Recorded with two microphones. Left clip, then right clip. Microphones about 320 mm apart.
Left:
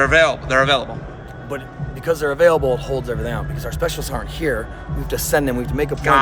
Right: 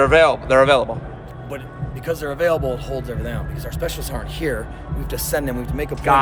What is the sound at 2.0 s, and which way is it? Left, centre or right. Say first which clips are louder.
Speech: left 5 dB; centre.